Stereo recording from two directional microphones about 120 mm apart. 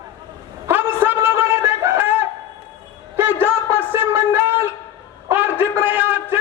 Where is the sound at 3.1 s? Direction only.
15° right (ahead or behind).